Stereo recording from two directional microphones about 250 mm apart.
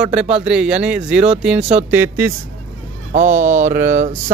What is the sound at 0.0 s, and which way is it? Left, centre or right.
Speech, centre.